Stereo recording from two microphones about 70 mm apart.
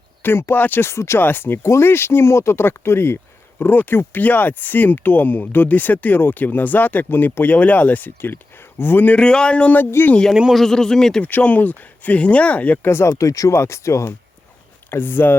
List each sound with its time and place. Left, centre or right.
0.2 s speech: left
1.6 s speech: left; by 9.8 s centre
9.8 s speech: left
10.5 s speech: centre
11.2 s speech: left
12.9 s speech: left
13.1 s speech: left
14.8 s speech: left